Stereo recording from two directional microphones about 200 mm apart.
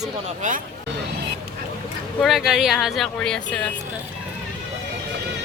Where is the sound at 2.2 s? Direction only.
Centre (ahead or behind).